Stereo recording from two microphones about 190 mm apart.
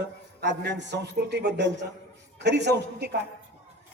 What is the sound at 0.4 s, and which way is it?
A man's voice, 65° right (ahead or behind).